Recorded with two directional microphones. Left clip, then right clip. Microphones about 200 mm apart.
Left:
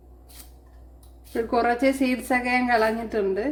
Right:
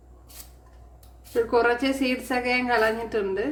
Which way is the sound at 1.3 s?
25° left (ahead or behind).